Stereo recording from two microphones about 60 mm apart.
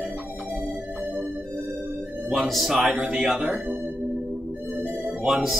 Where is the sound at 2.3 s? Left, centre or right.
Centre.